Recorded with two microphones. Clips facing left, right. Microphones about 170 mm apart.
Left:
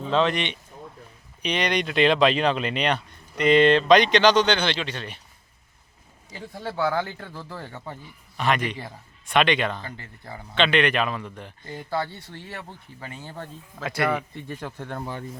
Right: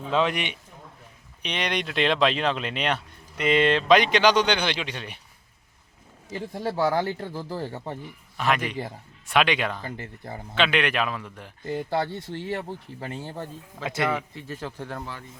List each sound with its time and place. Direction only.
0.1 s speech: 10° right (ahead or behind)
6.6 s speech: 35° right (ahead or behind)
8.4 s speech: 5° right (ahead or behind)
13.2 s speech: 15° right (ahead or behind)
14.4 s speech: 5° right (ahead or behind)